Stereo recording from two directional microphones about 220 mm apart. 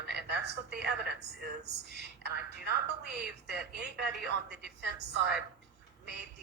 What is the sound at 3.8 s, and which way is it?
A woman's voice, 50° right (ahead or behind).